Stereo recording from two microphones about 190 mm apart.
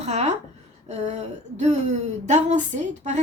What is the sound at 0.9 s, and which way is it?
A woman's voice, 35° right (ahead or behind).